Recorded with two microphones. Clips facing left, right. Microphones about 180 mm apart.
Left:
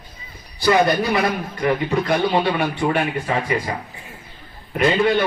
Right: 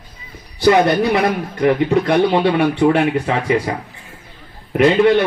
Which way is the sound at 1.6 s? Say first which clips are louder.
Right 6 dB; 65° right (ahead or behind).